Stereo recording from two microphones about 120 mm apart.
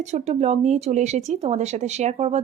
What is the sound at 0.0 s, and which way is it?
Speech, 70° right (ahead or behind).